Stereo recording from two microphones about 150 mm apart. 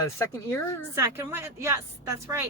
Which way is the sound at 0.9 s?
15° right (ahead or behind).